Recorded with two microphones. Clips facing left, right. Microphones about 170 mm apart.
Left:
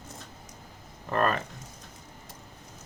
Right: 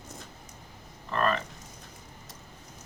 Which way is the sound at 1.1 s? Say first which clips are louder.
Left 1 dB; 45° left (ahead or behind).